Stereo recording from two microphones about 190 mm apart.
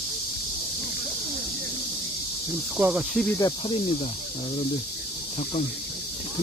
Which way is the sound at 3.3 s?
20° left (ahead or behind).